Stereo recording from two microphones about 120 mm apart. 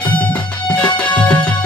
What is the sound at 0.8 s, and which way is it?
Music, 10° left (ahead or behind).